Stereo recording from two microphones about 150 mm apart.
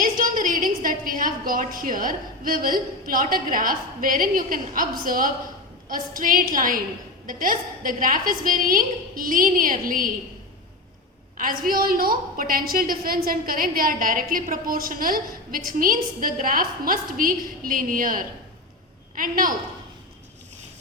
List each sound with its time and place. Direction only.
0.0 s a woman's voice: 65° right (ahead or behind)
11.3 s a woman's voice: 70° right (ahead or behind)